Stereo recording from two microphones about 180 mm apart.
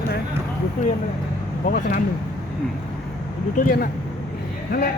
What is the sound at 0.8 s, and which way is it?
Speech, 45° left (ahead or behind).